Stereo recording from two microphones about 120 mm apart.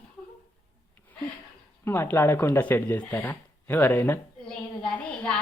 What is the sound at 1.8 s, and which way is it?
Speech, 20° left (ahead or behind).